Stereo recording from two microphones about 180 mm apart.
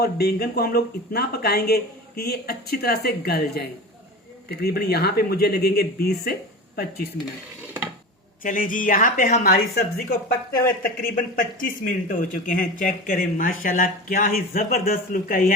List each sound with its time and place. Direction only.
0.0 s speech: 60° left (ahead or behind)
8.4 s speech: 50° left (ahead or behind)